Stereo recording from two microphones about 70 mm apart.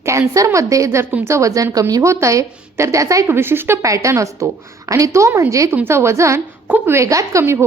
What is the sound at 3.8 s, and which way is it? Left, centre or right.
A woman's voice, right.